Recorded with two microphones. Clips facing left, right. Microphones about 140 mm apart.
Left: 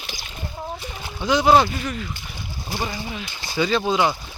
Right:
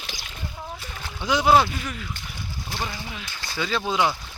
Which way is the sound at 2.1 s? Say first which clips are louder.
Left 2 dB; 5° left (ahead or behind).